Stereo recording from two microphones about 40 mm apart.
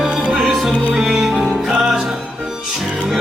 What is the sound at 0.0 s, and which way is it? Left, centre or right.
Music, right.